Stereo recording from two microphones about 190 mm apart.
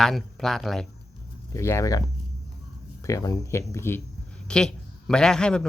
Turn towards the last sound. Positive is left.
turn(degrees=5)  # may be behind; listen again after turning